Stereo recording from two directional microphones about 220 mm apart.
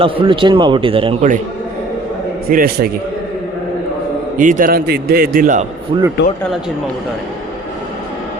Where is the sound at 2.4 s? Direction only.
40° right (ahead or behind).